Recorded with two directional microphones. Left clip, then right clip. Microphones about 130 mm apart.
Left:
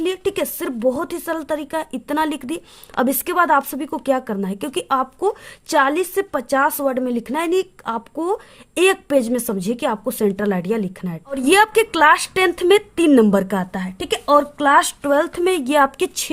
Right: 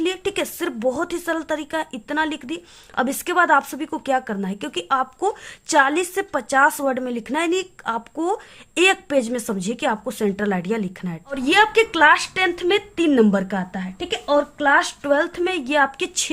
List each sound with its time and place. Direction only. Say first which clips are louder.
0.0 s speech: left 2 dB; 30° left (ahead or behind)
11.3 s speech: left 2 dB; 50° left (ahead or behind)